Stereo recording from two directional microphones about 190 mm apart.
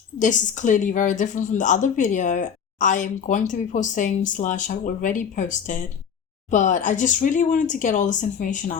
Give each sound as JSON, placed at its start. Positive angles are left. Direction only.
{"t": 0.2, "sound": "a woman's voice", "side_deg": 40}